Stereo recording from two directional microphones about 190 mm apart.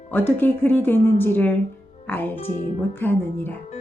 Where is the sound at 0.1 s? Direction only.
10° left (ahead or behind).